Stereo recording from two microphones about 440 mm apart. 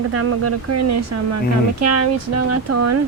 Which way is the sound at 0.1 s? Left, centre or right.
Right.